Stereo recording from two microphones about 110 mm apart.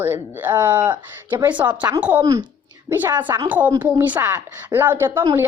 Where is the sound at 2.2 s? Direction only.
35° right (ahead or behind).